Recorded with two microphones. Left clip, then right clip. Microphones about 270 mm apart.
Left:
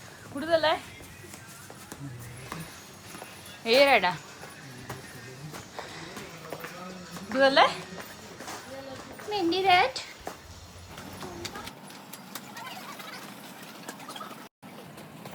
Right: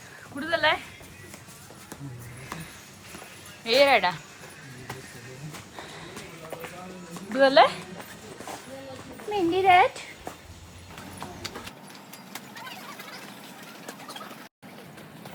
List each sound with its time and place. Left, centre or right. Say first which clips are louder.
0.3 s speech: right 1 dB; centre
3.6 s speech: right 1 dB; centre
5.7 s a sound: left 2 dB; centre
7.3 s speech: right 3 dB; centre
9.3 s a child's voice: right 3 dB; right